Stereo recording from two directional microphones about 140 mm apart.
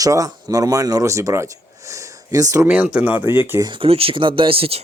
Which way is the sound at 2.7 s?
10° right (ahead or behind).